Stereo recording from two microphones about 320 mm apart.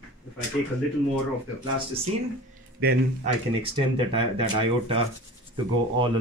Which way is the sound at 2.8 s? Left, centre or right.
Centre.